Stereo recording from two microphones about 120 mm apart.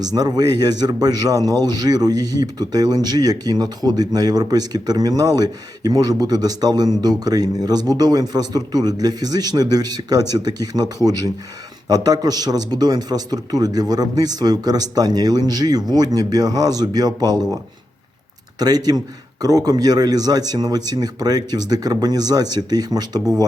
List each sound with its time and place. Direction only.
0.0 s speech: 30° right (ahead or behind)
18.6 s speech: 35° right (ahead or behind)